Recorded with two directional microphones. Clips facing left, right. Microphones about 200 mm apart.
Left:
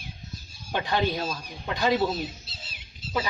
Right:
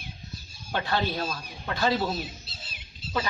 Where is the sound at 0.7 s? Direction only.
15° left (ahead or behind).